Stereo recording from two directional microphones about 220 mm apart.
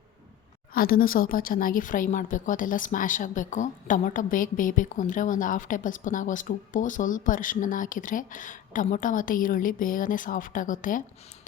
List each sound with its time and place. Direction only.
0.7 s speech: 40° left (ahead or behind)